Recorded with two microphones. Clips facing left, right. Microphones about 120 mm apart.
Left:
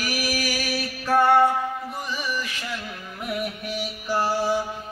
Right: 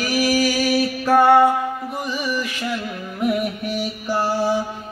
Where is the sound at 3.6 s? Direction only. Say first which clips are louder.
Right 5 dB; centre (ahead or behind).